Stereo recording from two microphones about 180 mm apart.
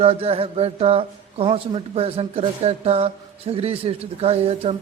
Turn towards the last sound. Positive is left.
turn(degrees=-35)  # may be behind; listen again after turning